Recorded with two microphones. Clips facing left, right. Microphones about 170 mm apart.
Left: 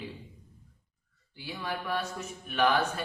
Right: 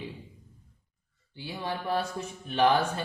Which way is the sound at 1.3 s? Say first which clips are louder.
Right 2 dB; 25° right (ahead or behind).